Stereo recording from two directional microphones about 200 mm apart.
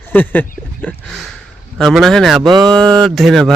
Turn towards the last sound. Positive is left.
turn(degrees=0)  # may be behind; listen again after turning